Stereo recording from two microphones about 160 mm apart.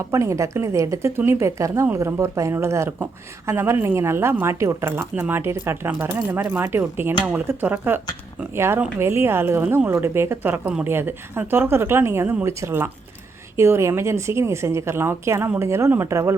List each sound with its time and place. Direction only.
0.0 s speech: 20° right (ahead or behind)